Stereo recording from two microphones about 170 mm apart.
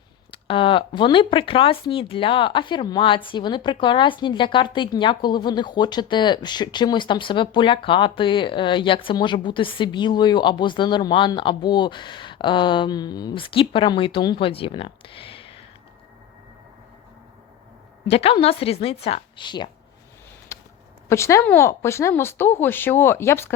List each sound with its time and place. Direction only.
0.3 s speech: 30° left (ahead or behind)
18.1 s a woman's voice: 35° left (ahead or behind)
20.5 s a sound: 15° left (ahead or behind)
21.1 s speech: 15° left (ahead or behind)